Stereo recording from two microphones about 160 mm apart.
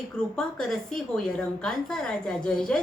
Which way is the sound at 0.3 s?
5° left (ahead or behind).